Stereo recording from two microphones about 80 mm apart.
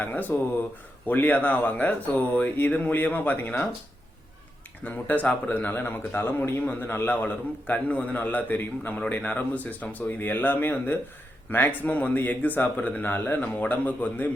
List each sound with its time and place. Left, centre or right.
0.0 s a man's voice: left
4.8 s a man's voice: left